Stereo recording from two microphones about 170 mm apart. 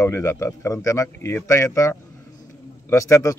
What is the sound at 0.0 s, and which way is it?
A man's voice, 15° left (ahead or behind).